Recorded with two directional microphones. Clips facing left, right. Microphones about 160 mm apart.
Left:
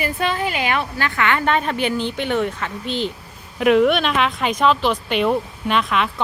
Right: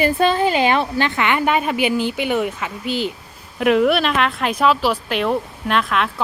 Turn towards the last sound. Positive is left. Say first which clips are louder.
# even
turn(degrees=0)  # may be behind; listen again after turning